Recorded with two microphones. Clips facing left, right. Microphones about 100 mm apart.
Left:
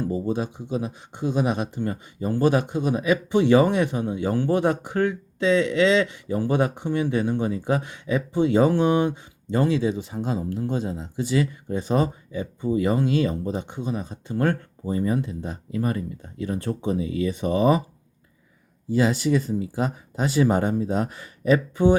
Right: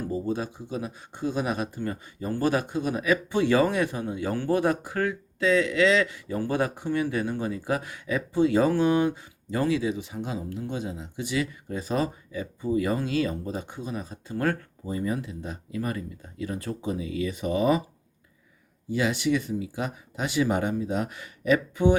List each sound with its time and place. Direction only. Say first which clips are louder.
0.1 s speech: left 3 dB; 20° left (ahead or behind)
18.9 s speech: left 4 dB; 40° left (ahead or behind)